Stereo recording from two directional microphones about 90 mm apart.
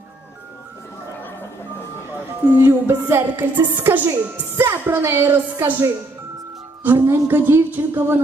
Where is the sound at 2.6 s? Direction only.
25° right (ahead or behind).